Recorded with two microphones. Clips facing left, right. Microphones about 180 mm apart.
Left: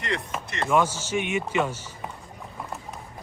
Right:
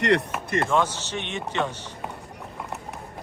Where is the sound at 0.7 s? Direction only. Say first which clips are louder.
Left 7 dB; 10° left (ahead or behind).